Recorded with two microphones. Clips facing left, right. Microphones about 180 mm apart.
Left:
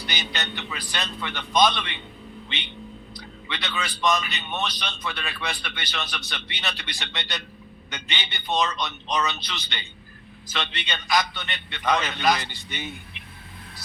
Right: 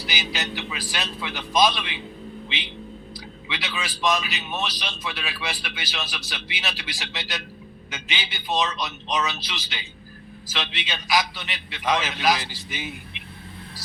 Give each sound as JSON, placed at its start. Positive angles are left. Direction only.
{"t": 0.1, "sound": "a man's voice", "side_deg": -5}
{"t": 3.2, "sound": "a man's voice", "side_deg": -5}